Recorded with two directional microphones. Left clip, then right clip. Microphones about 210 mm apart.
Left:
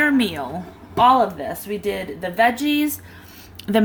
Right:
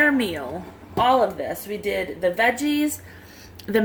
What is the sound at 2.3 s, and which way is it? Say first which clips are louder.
Speech: left 6 dB; 45° left (ahead or behind).